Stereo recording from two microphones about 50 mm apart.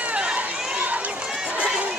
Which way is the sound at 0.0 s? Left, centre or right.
Right.